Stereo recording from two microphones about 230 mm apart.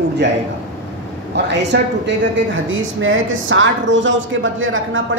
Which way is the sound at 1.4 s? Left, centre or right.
Right.